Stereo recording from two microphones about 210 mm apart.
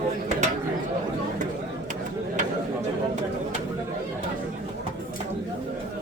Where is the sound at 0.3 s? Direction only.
35° right (ahead or behind).